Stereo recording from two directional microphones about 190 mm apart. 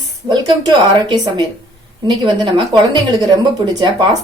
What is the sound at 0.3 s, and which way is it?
A woman's voice, 25° right (ahead or behind).